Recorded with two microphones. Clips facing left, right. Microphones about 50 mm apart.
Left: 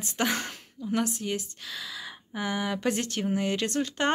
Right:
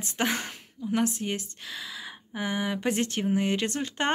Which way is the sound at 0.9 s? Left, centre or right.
Right.